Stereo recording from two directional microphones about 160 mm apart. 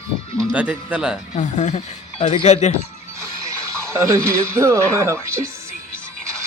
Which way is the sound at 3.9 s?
20° right (ahead or behind).